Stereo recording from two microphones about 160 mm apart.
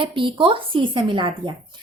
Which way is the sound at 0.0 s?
30° right (ahead or behind).